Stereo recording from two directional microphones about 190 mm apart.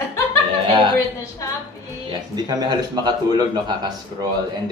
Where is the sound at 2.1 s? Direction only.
20° right (ahead or behind).